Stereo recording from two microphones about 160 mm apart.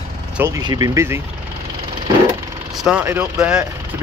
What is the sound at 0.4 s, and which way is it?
Speech, 20° right (ahead or behind).